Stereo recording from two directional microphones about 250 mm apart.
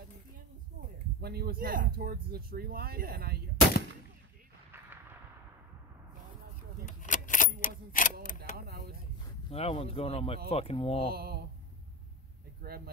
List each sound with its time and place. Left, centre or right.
1.2 s speech: right
6.9 s keys jangling: left
8.5 s speech: right
9.5 s speech: left
11.1 s speech: right
12.6 s speech: right